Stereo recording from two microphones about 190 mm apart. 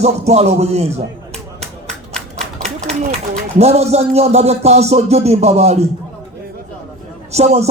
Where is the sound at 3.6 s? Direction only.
35° right (ahead or behind).